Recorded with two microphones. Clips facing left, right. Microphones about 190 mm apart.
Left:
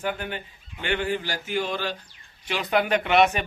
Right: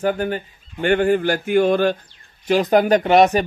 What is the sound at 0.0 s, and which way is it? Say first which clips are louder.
Speech: right 9 dB; 40° right (ahead or behind).